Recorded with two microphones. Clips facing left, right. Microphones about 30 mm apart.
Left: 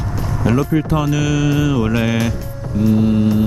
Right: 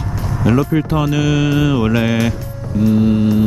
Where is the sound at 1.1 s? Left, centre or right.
Right.